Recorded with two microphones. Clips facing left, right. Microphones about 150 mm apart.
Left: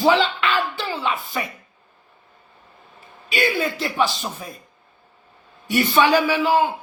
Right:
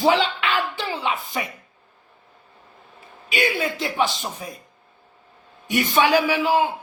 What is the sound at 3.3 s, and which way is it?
Speech, 20° right (ahead or behind).